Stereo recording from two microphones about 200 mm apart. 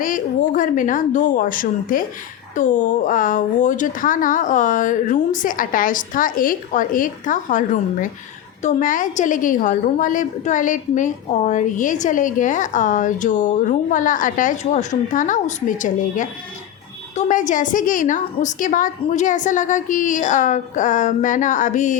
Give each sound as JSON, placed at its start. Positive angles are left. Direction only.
{"t": 0.0, "sound": "a woman's voice", "side_deg": 40}